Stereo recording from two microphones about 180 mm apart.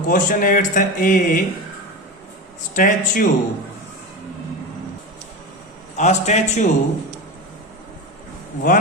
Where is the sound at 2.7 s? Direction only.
45° left (ahead or behind).